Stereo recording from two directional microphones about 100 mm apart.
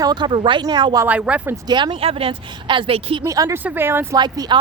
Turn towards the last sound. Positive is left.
turn(degrees=-45)  # may be behind; listen again after turning